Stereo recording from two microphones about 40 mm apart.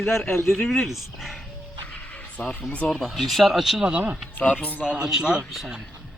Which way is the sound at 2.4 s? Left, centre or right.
Left.